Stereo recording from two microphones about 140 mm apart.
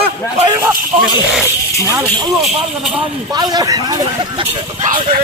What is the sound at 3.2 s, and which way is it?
Speech, 30° right (ahead or behind).